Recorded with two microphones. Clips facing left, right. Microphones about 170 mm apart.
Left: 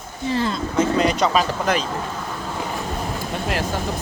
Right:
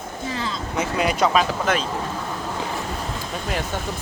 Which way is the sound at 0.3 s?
45° left (ahead or behind).